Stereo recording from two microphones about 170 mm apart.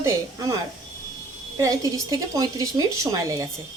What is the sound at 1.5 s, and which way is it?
Speech, 20° right (ahead or behind).